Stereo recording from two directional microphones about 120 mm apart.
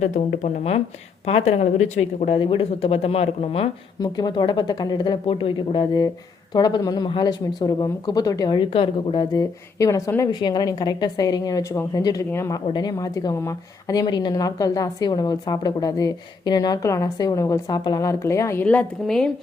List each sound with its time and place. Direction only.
0.0 s speech: 80° left
1.2 s speech: 60° left (ahead or behind)
2.4 s speech: 45° left (ahead or behind)
4.0 s a woman's voice: 35° left (ahead or behind)
5.2 s speech: 50° left (ahead or behind)
6.5 s a woman's voice: 35° left (ahead or behind)
8.7 s speech: 50° left (ahead or behind)
9.3 s a woman's voice: 30° left (ahead or behind)
18.6 s a woman's voice: 10° left (ahead or behind)